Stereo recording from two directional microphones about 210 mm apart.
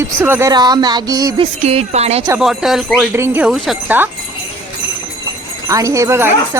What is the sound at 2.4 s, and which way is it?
Speech, centre (ahead or behind).